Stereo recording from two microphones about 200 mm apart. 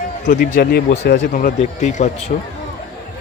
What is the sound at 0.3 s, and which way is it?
Speech, 45° left (ahead or behind).